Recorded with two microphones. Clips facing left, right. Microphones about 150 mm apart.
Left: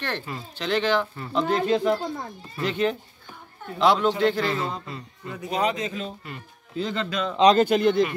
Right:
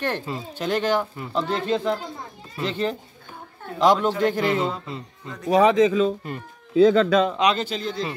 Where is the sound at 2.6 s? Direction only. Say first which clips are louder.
Left 1 dB; 30° right (ahead or behind).